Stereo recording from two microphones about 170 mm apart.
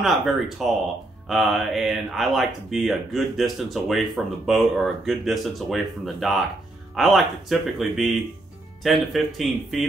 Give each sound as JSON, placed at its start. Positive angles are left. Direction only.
{"t": 0.0, "sound": "speech", "side_deg": 0}